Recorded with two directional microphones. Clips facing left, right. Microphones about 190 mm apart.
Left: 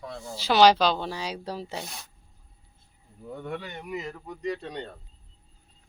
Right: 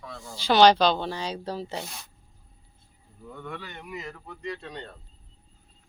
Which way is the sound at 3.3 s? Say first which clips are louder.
Left 4 dB; 40° left (ahead or behind).